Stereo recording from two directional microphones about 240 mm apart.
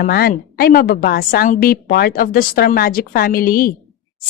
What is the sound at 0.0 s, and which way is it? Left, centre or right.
A woman's voice, left.